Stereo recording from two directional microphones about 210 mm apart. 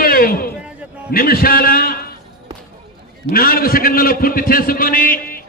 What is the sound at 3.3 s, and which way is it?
A man's voice, 45° left (ahead or behind).